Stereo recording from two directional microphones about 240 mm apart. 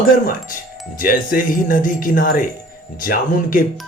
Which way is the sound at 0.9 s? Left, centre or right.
Left.